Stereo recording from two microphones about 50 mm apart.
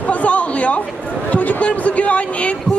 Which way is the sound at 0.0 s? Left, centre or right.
Left.